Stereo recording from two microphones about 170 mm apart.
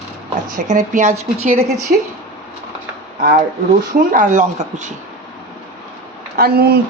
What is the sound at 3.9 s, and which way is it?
Speech, 50° right (ahead or behind).